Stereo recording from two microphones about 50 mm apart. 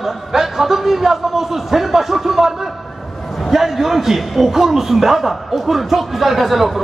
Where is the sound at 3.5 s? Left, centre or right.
Centre.